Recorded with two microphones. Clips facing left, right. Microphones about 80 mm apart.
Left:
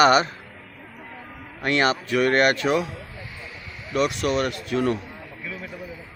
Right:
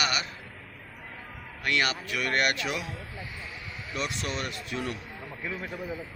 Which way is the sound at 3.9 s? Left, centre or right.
Left.